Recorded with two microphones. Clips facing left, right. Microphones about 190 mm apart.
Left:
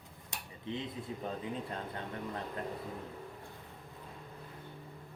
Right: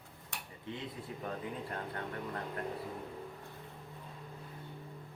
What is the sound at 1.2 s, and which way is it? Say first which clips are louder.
Speech: left 1 dB; 20° left (ahead or behind).